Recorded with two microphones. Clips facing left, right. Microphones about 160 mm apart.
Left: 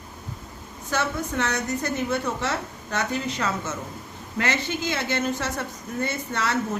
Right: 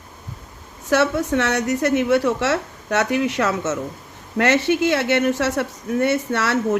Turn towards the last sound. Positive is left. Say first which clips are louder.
# right 6 dB
turn(degrees=-75)  # may be behind; listen again after turning